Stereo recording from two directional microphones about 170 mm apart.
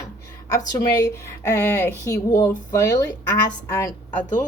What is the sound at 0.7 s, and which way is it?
Speech, 15° left (ahead or behind).